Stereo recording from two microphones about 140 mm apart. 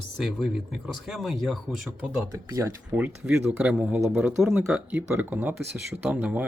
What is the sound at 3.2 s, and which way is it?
Speech, 10° right (ahead or behind).